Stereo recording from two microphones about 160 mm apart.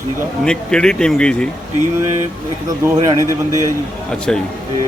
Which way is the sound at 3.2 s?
20° right (ahead or behind).